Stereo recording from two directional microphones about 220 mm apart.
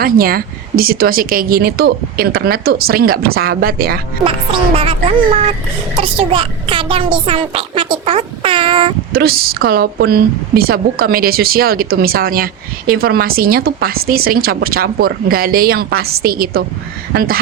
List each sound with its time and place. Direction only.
0.0 s speech: 40° right (ahead or behind)
4.8 s a woman's voice: 25° right (ahead or behind)
9.1 s speech: 45° right (ahead or behind)